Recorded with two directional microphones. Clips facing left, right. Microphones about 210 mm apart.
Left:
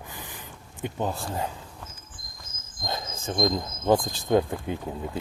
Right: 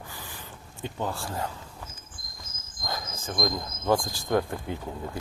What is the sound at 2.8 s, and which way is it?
Speech, 25° left (ahead or behind).